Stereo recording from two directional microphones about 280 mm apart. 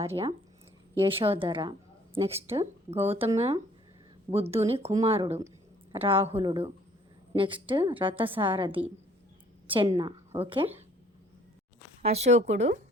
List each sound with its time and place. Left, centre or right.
0.9 s a woman's voice: centre
2.9 s speech: centre
3.2 s a woman's voice: right
12.0 s a woman's voice: right